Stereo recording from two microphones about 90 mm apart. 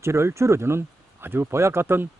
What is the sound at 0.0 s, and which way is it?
Speech, 30° right (ahead or behind).